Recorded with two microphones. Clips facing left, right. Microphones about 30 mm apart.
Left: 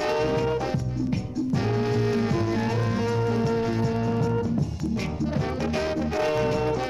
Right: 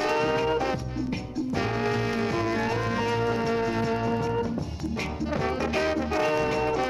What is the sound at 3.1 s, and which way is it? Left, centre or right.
Music, right.